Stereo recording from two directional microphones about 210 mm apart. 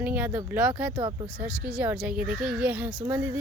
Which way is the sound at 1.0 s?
20° right (ahead or behind).